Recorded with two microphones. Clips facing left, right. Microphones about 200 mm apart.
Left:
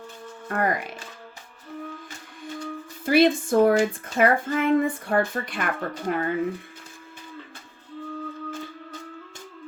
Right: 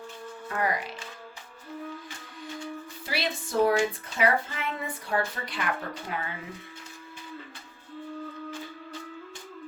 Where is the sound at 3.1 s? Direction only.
50° left (ahead or behind).